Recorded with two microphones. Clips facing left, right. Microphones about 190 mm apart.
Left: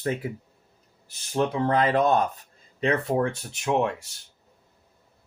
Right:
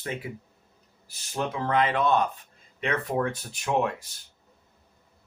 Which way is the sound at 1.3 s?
30° left (ahead or behind).